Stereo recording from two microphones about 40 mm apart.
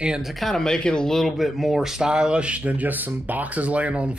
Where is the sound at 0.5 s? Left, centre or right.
Centre.